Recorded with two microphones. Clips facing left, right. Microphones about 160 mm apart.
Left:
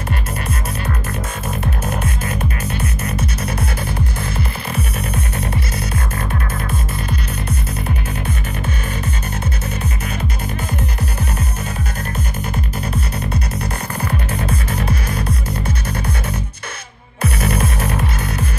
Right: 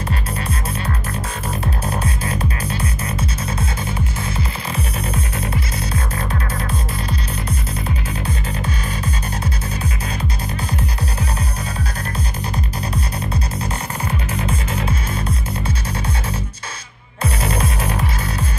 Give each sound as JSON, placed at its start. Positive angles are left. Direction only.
{"t": 2.8, "sound": "music", "side_deg": -30}
{"t": 17.2, "sound": "music", "side_deg": -30}